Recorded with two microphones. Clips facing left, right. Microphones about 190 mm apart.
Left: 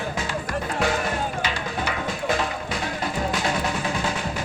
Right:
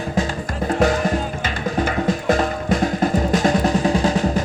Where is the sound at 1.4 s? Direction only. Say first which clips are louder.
Right 6 dB; 45° right (ahead or behind).